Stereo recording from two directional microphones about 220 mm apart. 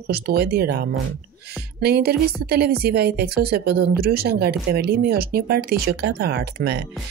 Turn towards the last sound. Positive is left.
turn(degrees=-45)  # may be behind; listen again after turning